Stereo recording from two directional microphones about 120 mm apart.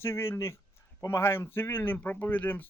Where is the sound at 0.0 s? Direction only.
20° left (ahead or behind).